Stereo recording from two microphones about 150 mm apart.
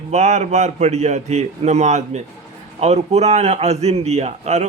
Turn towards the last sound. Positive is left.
turn(degrees=-50)  # may be behind; listen again after turning